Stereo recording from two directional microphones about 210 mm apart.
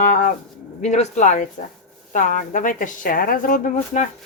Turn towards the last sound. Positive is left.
turn(degrees=35)  # may be behind; listen again after turning